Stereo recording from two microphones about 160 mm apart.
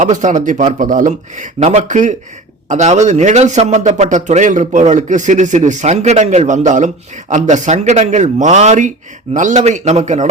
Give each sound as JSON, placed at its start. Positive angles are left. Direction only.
{"t": 0.0, "sound": "a man's voice", "side_deg": -50}